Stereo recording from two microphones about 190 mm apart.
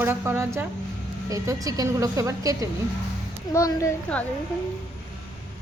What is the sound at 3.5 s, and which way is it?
Speech, 15° left (ahead or behind).